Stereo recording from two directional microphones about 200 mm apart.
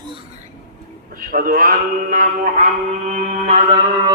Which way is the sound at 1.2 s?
45° right (ahead or behind).